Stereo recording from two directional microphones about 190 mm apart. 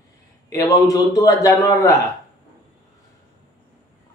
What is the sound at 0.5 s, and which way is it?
A man's voice, 20° left (ahead or behind).